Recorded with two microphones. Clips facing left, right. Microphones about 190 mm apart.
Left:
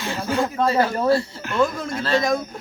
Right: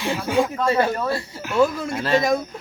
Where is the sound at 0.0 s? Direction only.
10° right (ahead or behind).